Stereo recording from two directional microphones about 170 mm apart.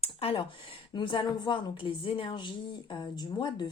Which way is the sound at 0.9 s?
30° left (ahead or behind).